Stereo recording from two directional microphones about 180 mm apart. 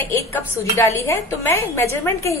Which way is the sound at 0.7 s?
15° left (ahead or behind).